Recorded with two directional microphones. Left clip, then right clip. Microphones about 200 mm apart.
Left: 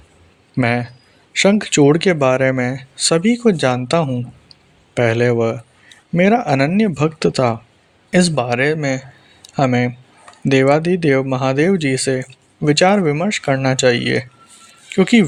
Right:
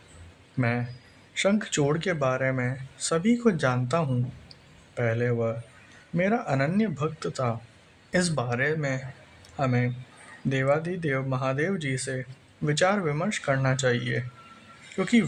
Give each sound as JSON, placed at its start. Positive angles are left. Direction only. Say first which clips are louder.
{"t": 0.6, "sound": "speech", "louder": "left 11 dB", "side_deg": 40}